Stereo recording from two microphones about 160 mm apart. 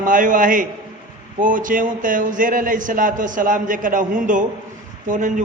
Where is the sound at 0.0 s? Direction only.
55° right (ahead or behind).